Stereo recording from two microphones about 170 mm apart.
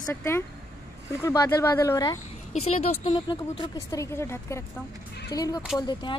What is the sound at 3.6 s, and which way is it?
Speech, 20° left (ahead or behind).